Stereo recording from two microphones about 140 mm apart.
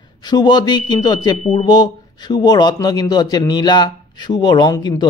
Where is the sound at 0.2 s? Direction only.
30° left (ahead or behind).